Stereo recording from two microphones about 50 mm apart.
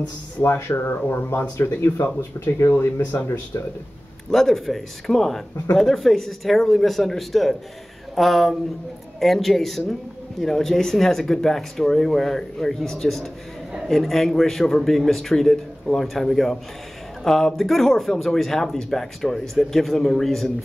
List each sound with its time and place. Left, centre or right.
0.4 s speech: left
4.3 s speech: centre